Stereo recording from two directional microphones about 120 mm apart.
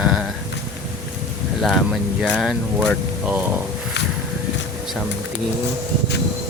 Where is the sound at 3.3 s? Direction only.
15° right (ahead or behind).